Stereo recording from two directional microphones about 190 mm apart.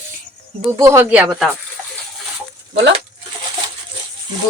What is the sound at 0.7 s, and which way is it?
Speech, 15° right (ahead or behind).